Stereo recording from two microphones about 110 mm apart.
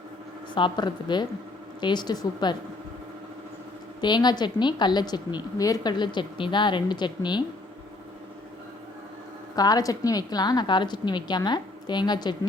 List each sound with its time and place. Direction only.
0.5 s a woman's voice: 45° left (ahead or behind)
4.0 s a woman's voice: 40° left (ahead or behind)
9.6 s a woman's voice: 35° left (ahead or behind)